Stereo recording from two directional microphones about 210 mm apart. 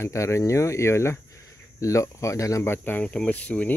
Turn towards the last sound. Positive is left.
turn(degrees=5)  # may be behind; listen again after turning